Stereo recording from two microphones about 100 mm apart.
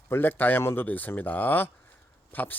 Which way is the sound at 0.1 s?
20° left (ahead or behind).